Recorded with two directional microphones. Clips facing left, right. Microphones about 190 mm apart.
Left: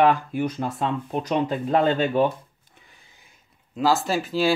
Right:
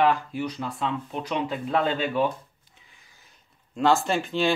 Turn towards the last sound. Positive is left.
turn(degrees=5)  # may be behind; listen again after turning